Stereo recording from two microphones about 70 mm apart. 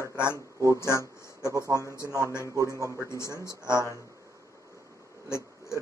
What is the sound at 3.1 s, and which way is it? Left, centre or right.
Speech, left.